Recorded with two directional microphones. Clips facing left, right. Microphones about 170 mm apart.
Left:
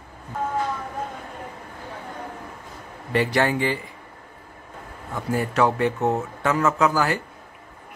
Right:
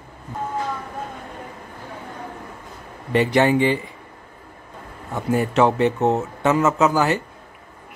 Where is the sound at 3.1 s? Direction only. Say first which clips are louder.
Right 4 dB; 20° right (ahead or behind).